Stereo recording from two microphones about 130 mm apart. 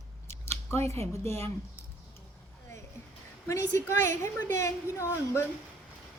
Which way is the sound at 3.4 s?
20° left (ahead or behind).